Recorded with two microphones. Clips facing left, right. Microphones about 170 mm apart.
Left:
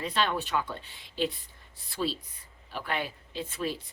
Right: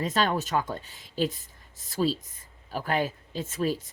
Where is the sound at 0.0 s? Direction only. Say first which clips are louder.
Right 3 dB; 40° right (ahead or behind).